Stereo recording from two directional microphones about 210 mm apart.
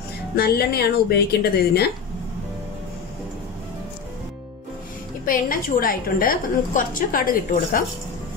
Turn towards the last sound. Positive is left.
turn(degrees=40)  # may be behind; listen again after turning